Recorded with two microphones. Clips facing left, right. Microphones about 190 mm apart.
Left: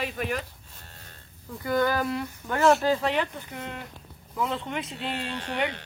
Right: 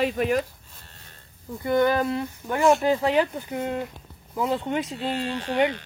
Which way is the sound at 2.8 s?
25° right (ahead or behind).